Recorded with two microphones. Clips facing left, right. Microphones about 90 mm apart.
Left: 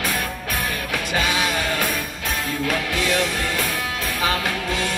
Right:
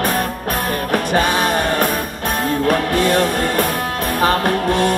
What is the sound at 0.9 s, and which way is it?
Music, 45° right (ahead or behind).